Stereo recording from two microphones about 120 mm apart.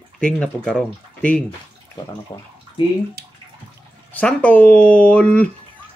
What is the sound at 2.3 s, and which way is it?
Speech, 30° left (ahead or behind).